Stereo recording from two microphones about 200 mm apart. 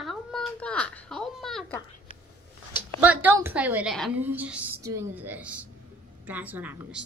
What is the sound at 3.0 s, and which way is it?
A woman's voice, 10° right (ahead or behind).